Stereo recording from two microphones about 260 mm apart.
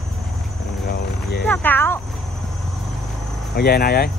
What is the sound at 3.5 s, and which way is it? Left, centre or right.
Speech, left.